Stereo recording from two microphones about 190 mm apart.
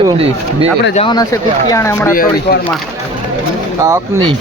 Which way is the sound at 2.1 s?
50° left (ahead or behind).